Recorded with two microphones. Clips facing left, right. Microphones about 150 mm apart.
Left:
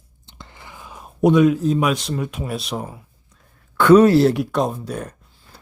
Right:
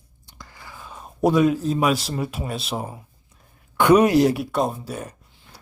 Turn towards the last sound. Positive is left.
turn(degrees=-10)  # may be behind; listen again after turning